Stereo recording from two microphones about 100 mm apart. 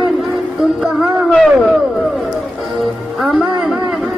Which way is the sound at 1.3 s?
Centre (ahead or behind).